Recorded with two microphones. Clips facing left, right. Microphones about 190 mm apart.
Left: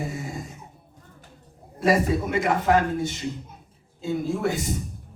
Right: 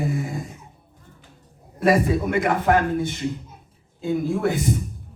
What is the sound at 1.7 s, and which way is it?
A man's voice, 55° right (ahead or behind).